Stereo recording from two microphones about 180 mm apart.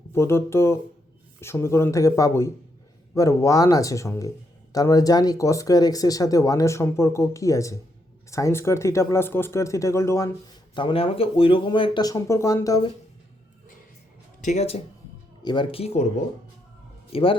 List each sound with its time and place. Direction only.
0.1 s speech: 15° left (ahead or behind)
10.8 s speech: 30° left (ahead or behind)
14.4 s speech: 35° left (ahead or behind)
17.1 s a man's voice: 30° left (ahead or behind)